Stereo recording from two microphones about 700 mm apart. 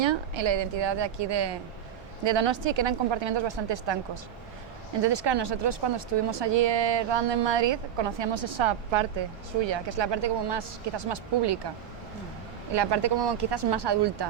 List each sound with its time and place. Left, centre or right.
0.0 s a woman's voice: right
12.7 s a woman's voice: right